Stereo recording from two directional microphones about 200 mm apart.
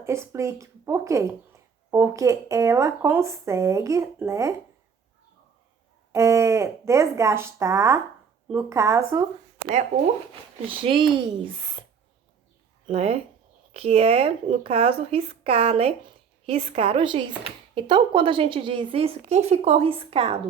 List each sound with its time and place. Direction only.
0.0 s speech: 15° right (ahead or behind)
6.1 s speech: 15° right (ahead or behind)
10.7 s a woman's voice: 25° right (ahead or behind)
12.9 s a woman's voice: 30° right (ahead or behind)